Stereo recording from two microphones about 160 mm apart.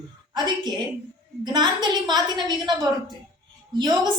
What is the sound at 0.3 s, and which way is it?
A woman's voice, 25° right (ahead or behind).